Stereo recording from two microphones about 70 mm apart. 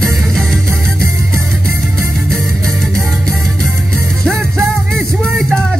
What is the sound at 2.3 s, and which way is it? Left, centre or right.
Music, centre.